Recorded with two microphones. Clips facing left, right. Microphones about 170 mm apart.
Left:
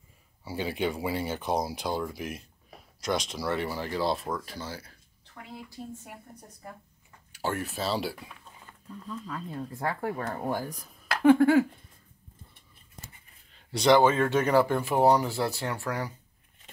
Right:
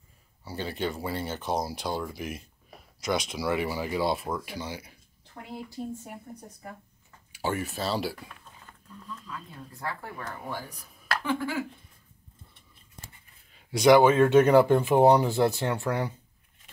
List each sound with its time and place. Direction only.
0.5 s speech: 10° left (ahead or behind); by 4.9 s 15° right (ahead or behind)
6.3 s speech: 5° right (ahead or behind)
9.2 s speech: 45° left (ahead or behind)
11.2 s speech: 55° left (ahead or behind)
13.6 s speech: 10° right (ahead or behind)